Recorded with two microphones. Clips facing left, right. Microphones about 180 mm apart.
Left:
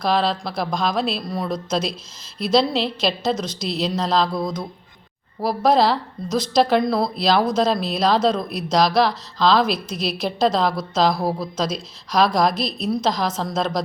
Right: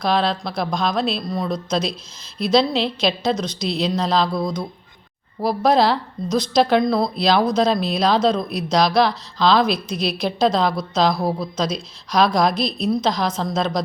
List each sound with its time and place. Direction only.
0.0 s speech: centre (ahead or behind)